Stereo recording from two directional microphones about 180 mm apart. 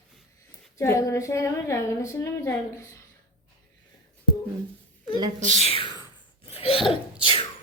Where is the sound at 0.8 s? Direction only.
15° left (ahead or behind).